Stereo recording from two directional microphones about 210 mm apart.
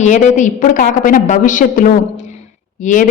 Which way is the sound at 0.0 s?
35° left (ahead or behind).